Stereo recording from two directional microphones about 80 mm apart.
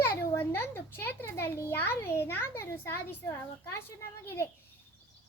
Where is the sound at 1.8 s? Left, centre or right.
Left.